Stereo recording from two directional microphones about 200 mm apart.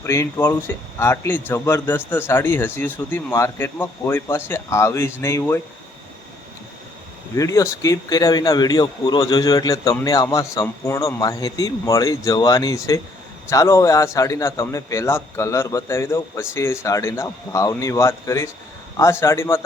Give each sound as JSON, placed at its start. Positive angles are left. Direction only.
{"t": 0.0, "sound": "a man's voice", "side_deg": 15}
{"t": 7.3, "sound": "a man's voice", "side_deg": 15}